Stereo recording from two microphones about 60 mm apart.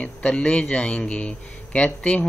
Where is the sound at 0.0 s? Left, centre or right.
Left.